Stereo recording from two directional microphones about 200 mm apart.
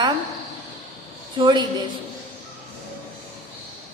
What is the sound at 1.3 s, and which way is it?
Speech, 20° right (ahead or behind).